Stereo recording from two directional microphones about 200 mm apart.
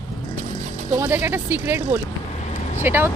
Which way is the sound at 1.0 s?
10° right (ahead or behind).